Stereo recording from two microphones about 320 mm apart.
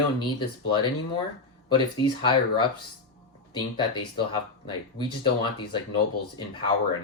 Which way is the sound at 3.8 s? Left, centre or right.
Centre.